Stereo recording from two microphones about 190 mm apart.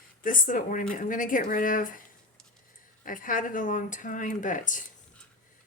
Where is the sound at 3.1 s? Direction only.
45° left (ahead or behind).